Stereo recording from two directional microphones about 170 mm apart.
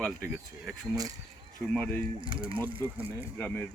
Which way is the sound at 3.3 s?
10° left (ahead or behind).